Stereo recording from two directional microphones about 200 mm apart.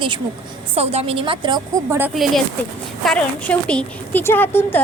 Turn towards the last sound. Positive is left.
turn(degrees=10)  # may be behind; listen again after turning